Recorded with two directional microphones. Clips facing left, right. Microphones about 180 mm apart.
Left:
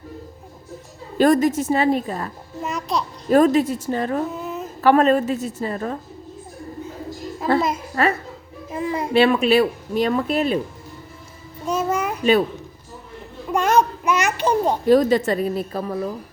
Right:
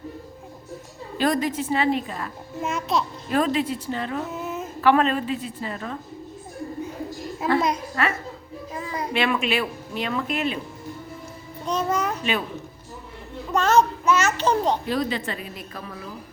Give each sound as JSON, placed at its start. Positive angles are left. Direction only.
{"t": 1.2, "sound": "a woman's voice", "side_deg": 45}
{"t": 2.6, "sound": "a child's voice", "side_deg": 0}
{"t": 3.2, "sound": "a woman's voice", "side_deg": 45}
{"t": 4.4, "sound": "a sound", "side_deg": 0}
{"t": 4.8, "sound": "a woman's voice", "side_deg": 40}
{"t": 8.0, "sound": "a woman's voice", "side_deg": 40}
{"t": 8.7, "sound": "a child's voice", "side_deg": 25}
{"t": 11.6, "sound": "child singing", "side_deg": 10}
{"t": 13.5, "sound": "a sound", "side_deg": 10}
{"t": 14.8, "sound": "a woman's voice", "side_deg": 45}